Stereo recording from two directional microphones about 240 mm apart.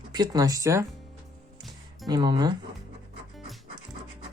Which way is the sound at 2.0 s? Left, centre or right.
Centre.